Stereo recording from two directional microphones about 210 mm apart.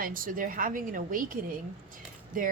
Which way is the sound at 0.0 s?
40° right (ahead or behind).